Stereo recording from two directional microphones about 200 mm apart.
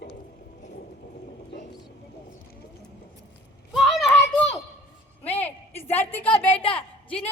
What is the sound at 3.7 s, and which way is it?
Children playing, centre (ahead or behind).